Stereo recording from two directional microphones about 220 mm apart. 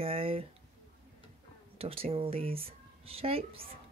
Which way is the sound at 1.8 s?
25° right (ahead or behind).